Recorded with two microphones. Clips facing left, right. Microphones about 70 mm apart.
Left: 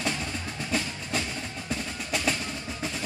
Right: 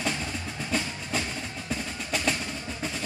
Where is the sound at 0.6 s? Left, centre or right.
Centre.